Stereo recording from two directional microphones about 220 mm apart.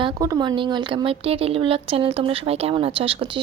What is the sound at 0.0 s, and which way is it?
Speech, 20° right (ahead or behind).